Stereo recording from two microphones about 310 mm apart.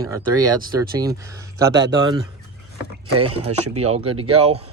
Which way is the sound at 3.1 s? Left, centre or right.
Right.